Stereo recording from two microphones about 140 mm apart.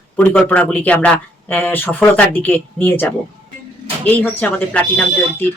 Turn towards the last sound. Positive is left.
turn(degrees=15)  # may be behind; listen again after turning